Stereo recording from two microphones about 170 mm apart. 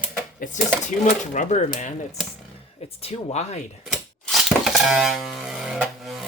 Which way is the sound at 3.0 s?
35° left (ahead or behind).